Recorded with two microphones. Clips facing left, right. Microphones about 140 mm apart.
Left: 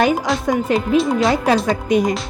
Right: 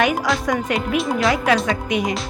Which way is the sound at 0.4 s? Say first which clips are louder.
Left 3 dB; 30° left (ahead or behind).